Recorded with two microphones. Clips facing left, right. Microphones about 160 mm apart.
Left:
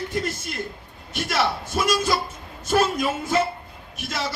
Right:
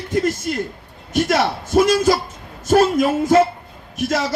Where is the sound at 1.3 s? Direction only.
50° right (ahead or behind).